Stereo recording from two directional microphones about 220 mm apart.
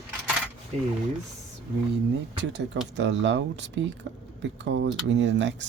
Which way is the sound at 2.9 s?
55° right (ahead or behind).